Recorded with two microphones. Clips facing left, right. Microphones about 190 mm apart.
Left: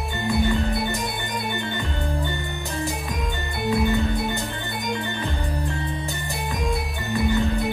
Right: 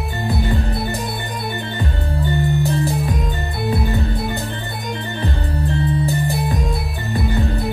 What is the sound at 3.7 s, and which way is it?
Music, 35° right (ahead or behind).